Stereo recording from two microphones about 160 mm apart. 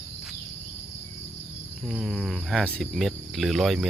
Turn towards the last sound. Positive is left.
turn(degrees=0)  # may be behind; listen again after turning